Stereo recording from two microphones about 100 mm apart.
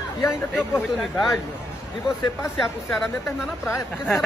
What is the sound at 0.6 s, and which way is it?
Speech, centre (ahead or behind).